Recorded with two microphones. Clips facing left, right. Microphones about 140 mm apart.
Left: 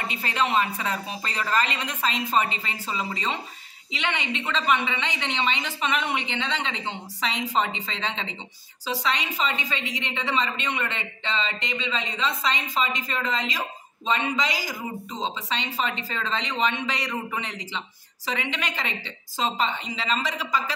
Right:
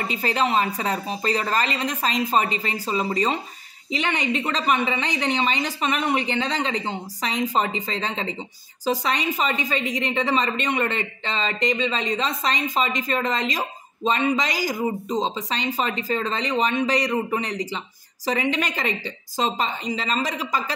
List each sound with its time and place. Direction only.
0.0 s a woman's voice: 35° right (ahead or behind)